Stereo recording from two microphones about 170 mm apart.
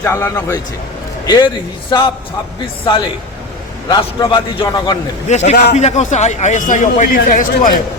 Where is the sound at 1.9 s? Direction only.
25° left (ahead or behind).